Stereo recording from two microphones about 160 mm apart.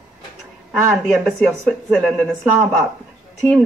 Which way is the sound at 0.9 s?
Centre (ahead or behind).